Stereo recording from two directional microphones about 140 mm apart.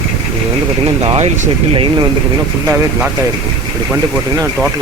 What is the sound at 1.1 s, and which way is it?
Speech, 50° right (ahead or behind).